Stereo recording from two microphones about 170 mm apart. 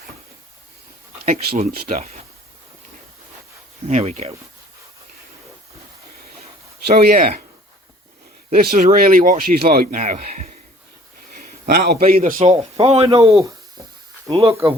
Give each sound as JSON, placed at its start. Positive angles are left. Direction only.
{"t": 1.5, "sound": "speech", "side_deg": -45}
{"t": 3.8, "sound": "speech", "side_deg": -40}
{"t": 6.8, "sound": "speech", "side_deg": -60}
{"t": 8.6, "sound": "a man's voice", "side_deg": -55}
{"t": 13.0, "sound": "speech", "side_deg": -20}
{"t": 14.3, "sound": "speech", "side_deg": -35}